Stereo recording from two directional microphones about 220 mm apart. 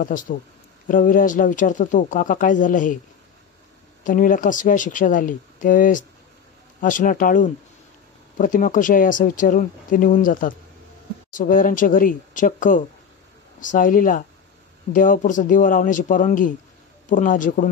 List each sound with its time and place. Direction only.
0.0 s speech: 40° left (ahead or behind)
4.0 s speech: 35° left (ahead or behind)